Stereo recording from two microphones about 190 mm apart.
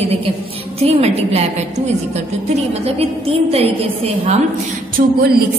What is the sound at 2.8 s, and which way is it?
A woman's voice, 30° right (ahead or behind).